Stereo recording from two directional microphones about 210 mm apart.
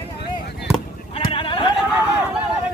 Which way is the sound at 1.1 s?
25° left (ahead or behind).